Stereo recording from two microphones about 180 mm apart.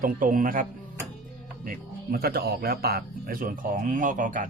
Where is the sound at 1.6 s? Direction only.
55° right (ahead or behind).